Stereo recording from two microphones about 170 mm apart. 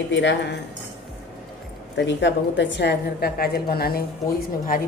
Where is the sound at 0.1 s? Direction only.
90° left.